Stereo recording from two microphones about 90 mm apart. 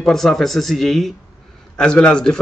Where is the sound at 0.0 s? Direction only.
5° left (ahead or behind).